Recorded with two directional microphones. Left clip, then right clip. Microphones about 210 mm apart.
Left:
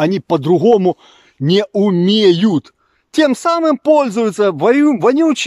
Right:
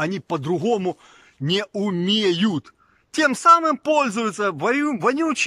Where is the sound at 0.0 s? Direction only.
20° left (ahead or behind).